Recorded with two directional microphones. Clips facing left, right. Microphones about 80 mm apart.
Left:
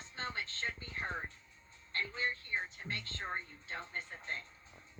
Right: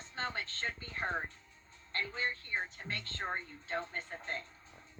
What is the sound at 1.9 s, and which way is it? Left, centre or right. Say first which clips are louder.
Speech: right 1 dB; right.